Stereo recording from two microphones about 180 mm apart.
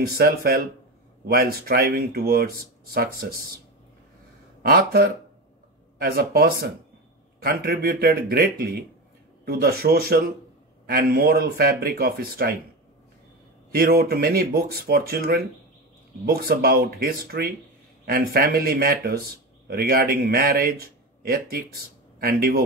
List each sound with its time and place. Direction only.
0.2 s speech: 55° right (ahead or behind)
4.6 s speech: 55° right (ahead or behind)
13.7 s speech: 55° right (ahead or behind)